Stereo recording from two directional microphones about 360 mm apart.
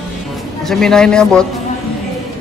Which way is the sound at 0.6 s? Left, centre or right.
Centre.